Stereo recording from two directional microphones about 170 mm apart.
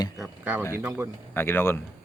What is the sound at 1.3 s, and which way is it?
Speech, 10° left (ahead or behind).